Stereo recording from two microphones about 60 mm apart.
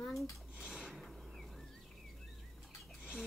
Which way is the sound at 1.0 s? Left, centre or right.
Centre.